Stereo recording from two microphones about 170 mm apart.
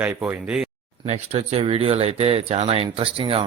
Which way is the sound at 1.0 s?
40° right (ahead or behind).